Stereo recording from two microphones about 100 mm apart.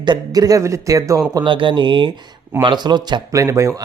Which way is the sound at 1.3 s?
55° right (ahead or behind).